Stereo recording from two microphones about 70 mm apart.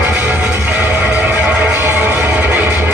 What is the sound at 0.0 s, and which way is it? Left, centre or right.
Music, right.